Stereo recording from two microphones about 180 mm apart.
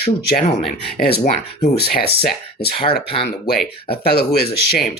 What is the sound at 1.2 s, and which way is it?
Speech, 40° left (ahead or behind).